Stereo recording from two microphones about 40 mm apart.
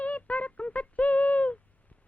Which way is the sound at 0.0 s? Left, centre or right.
Left.